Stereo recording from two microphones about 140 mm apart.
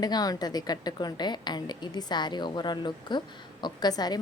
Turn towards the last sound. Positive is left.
turn(degrees=30)  # may be behind; listen again after turning